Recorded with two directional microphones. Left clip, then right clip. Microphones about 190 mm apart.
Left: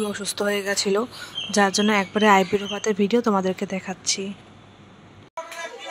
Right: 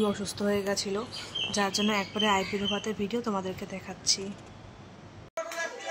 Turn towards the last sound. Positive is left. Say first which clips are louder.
# left 4 dB
turn(degrees=25)  # may be behind; listen again after turning